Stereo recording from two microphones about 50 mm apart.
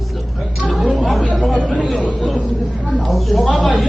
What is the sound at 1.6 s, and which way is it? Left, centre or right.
Speech, left.